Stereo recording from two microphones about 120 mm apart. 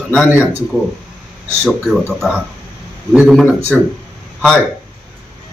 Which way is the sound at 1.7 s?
Centre (ahead or behind).